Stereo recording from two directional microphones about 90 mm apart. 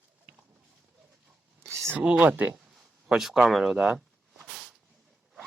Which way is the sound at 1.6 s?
30° right (ahead or behind).